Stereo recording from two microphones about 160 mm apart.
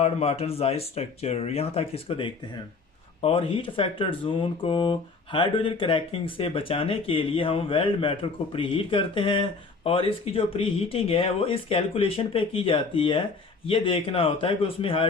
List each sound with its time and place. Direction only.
0.0 s speech: 40° left (ahead or behind)